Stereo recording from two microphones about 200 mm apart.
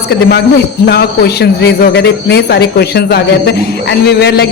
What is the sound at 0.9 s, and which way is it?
A man's voice, 55° left (ahead or behind).